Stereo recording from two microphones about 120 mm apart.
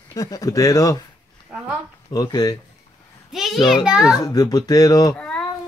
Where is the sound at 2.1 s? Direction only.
30° left (ahead or behind).